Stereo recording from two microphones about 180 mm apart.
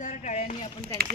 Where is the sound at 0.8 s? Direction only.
50° right (ahead or behind).